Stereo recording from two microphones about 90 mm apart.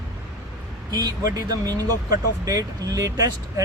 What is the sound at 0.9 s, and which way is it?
Speech, 45° right (ahead or behind).